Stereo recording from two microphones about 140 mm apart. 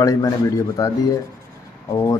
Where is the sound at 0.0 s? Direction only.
20° left (ahead or behind).